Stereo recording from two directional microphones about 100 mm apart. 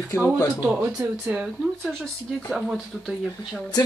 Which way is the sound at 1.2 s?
10° right (ahead or behind).